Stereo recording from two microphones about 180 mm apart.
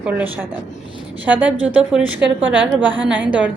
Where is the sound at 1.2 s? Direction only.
10° right (ahead or behind).